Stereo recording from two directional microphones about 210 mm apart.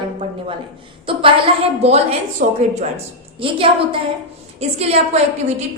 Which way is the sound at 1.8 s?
30° right (ahead or behind).